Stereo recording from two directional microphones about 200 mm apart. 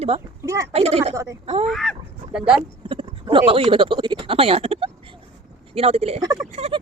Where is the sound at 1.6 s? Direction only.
Centre (ahead or behind).